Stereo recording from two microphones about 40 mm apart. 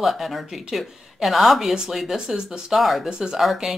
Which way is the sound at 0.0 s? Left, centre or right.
Centre.